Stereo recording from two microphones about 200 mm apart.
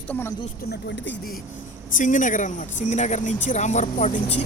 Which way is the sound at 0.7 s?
60° left (ahead or behind).